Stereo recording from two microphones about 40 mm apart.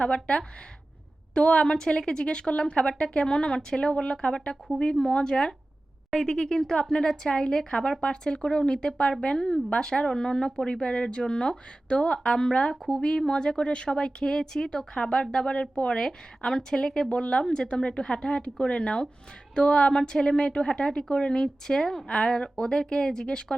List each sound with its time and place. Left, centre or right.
0.0 s a woman's voice: left
16.4 s a woman's voice: centre
22.0 s a woman's voice: left